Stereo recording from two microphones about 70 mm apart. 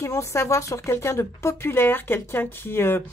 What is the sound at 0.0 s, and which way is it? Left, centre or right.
A woman's voice, left.